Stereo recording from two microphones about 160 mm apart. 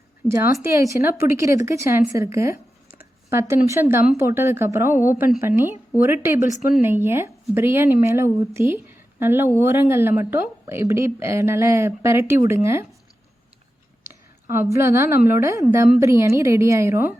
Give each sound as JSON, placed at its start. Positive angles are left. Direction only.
{"t": 0.6, "sound": "a woman's voice", "side_deg": -20}
{"t": 6.4, "sound": "speech", "side_deg": 50}
{"t": 6.8, "sound": "a woman's voice", "side_deg": -15}
{"t": 14.5, "sound": "a woman's voice", "side_deg": -15}